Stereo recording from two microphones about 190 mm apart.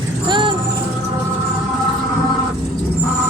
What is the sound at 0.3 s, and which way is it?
Vehicle, 25° right (ahead or behind).